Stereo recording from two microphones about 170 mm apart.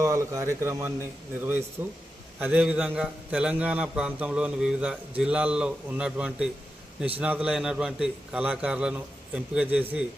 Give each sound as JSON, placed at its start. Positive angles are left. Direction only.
{"t": 0.0, "sound": "a man's voice", "side_deg": -20}